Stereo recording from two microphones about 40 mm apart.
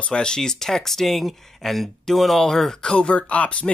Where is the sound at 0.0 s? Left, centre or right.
Left.